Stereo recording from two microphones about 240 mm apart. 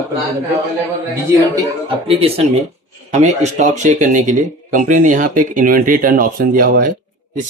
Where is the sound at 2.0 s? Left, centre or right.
Right.